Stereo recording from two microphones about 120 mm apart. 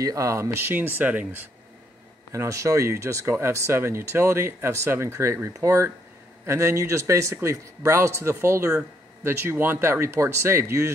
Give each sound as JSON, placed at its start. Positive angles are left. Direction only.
{"t": 0.0, "sound": "speech", "side_deg": -25}
{"t": 2.3, "sound": "speech", "side_deg": -25}